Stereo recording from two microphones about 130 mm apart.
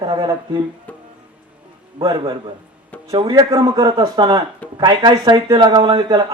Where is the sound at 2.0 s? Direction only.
35° right (ahead or behind).